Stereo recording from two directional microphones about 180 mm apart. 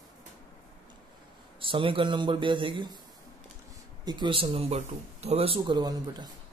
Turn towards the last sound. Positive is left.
turn(degrees=-25)  # may be behind; listen again after turning